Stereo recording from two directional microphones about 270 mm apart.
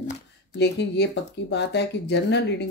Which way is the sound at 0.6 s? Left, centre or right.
Left.